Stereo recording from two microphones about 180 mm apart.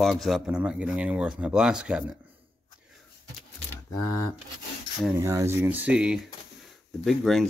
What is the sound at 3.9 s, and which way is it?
Speech, 20° left (ahead or behind).